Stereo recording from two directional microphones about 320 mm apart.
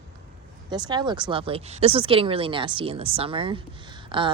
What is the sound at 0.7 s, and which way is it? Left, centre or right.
Speech, centre.